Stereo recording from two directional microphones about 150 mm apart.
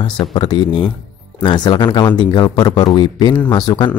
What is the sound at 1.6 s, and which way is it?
Speech, 30° left (ahead or behind).